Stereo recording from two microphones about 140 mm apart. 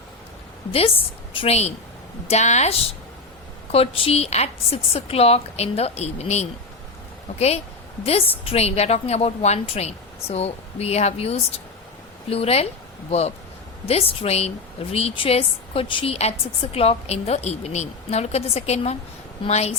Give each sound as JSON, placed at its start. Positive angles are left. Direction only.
{"t": 0.7, "sound": "a woman's voice", "side_deg": 45}
{"t": 3.7, "sound": "a woman's voice", "side_deg": 45}